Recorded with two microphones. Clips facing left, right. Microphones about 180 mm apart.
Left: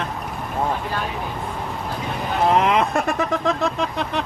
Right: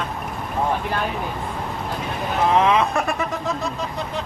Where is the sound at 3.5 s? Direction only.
65° left (ahead or behind).